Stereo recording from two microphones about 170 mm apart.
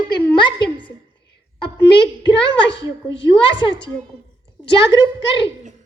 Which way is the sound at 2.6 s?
90° left.